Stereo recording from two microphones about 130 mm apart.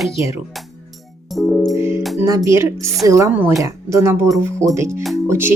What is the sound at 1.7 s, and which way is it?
Speech, 20° right (ahead or behind).